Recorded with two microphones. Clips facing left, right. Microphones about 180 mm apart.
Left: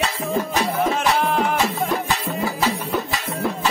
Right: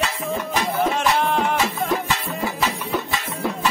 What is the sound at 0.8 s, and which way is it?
Music, centre (ahead or behind).